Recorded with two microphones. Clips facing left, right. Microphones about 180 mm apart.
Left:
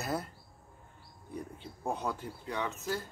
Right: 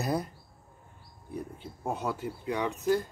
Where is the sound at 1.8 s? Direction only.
5° right (ahead or behind).